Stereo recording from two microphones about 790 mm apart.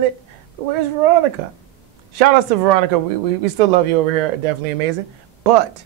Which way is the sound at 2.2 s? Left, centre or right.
Right.